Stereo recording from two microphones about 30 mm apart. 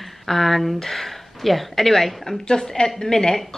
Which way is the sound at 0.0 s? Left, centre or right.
Centre.